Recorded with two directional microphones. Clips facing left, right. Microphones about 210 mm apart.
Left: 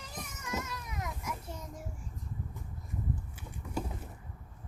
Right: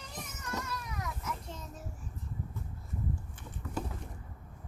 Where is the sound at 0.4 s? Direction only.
20° left (ahead or behind).